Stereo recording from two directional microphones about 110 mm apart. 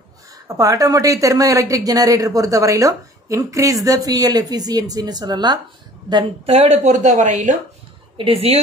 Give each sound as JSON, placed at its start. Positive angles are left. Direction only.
{"t": 0.5, "sound": "a woman's voice", "side_deg": -30}
{"t": 6.4, "sound": "speech", "side_deg": -70}
{"t": 8.2, "sound": "speech", "side_deg": -60}